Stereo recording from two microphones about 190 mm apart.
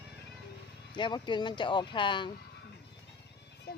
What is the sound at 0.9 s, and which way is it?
Speech, 25° left (ahead or behind).